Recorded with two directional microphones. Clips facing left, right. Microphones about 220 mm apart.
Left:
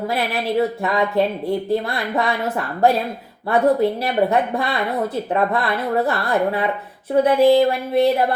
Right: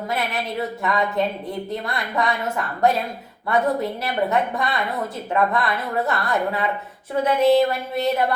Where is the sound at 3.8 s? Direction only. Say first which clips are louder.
Left 6 dB; 30° left (ahead or behind).